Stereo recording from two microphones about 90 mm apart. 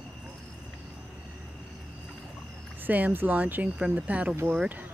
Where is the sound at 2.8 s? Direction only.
20° right (ahead or behind).